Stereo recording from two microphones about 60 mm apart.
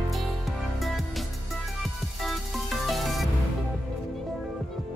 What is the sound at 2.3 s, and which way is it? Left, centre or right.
Music, centre.